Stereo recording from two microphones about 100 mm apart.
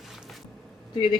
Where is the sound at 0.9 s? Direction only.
50° left (ahead or behind).